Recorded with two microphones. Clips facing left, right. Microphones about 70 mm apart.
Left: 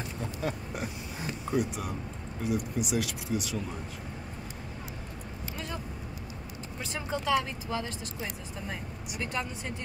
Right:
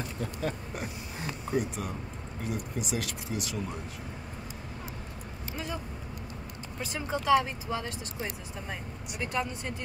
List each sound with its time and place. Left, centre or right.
0.4 s pig: centre
1.5 s speech: centre
6.8 s speech: centre
9.2 s speech: centre